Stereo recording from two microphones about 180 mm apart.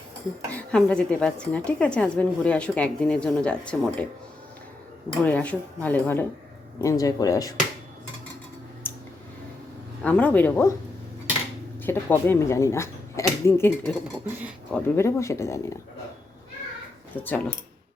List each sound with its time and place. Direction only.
0.5 s a woman's voice: 5° left (ahead or behind)
5.2 s a woman's voice: 10° left (ahead or behind)
8.9 s a sound: 10° left (ahead or behind)
10.0 s a woman's voice: 5° left (ahead or behind)
11.8 s a woman's voice: 10° left (ahead or behind)
17.2 s a woman's voice: 10° left (ahead or behind)